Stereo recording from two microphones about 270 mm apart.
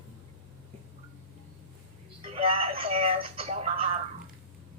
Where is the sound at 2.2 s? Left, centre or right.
Right.